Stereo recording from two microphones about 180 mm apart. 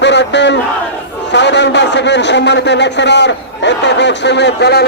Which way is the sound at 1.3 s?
75° left (ahead or behind).